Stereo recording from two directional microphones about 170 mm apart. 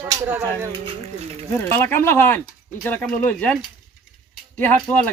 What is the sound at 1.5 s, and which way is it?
Speech, 15° left (ahead or behind).